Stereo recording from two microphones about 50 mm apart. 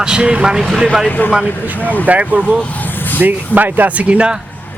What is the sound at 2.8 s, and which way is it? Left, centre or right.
Vehicle, left.